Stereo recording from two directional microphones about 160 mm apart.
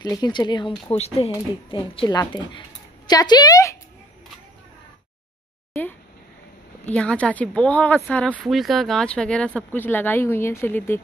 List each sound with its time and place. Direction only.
0.0 s speech: 25° left (ahead or behind)
0.9 s speech: 40° left (ahead or behind); by 3.7 s 20° left (ahead or behind)
6.9 s speech: 5° left (ahead or behind)